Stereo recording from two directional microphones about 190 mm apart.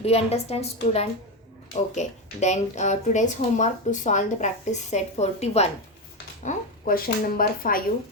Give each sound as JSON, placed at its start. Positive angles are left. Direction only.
{"t": 0.0, "sound": "a woman's voice", "side_deg": 35}